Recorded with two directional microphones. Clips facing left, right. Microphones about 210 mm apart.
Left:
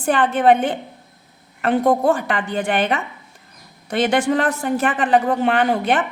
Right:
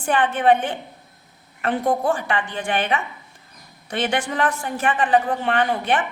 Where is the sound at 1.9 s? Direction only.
40° left (ahead or behind).